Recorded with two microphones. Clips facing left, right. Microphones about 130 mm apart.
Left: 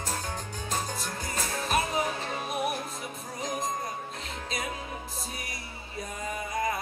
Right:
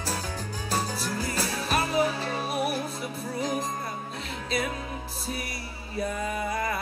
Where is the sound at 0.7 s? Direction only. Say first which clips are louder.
Right 4 dB; 70° right (ahead or behind).